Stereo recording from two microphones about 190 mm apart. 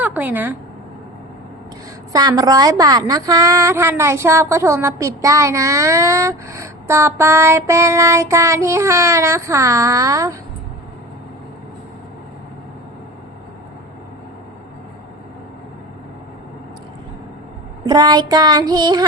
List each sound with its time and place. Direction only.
0.0 s a sound: 10° right (ahead or behind)
2.1 s a woman's voice: 20° right (ahead or behind)
17.8 s child singing: 20° right (ahead or behind)